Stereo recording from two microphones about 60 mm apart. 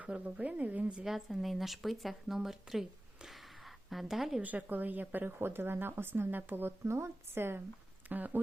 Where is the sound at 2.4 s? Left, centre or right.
Centre.